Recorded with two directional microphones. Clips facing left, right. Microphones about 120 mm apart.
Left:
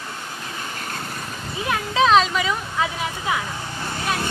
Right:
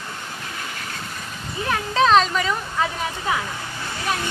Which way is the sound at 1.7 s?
5° left (ahead or behind).